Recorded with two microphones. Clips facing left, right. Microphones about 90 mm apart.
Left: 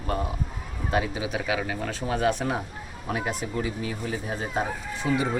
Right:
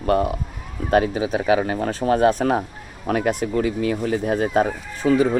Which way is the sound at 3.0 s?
60° right (ahead or behind).